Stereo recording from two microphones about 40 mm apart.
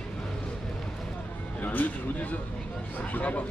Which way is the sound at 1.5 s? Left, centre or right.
Left.